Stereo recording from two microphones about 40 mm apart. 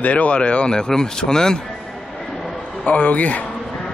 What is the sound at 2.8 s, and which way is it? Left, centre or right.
Speech, left.